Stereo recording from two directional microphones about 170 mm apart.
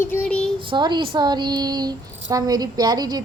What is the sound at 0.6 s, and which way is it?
Speech, 30° right (ahead or behind).